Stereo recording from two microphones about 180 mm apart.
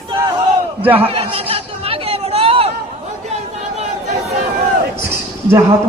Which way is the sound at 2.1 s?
30° right (ahead or behind).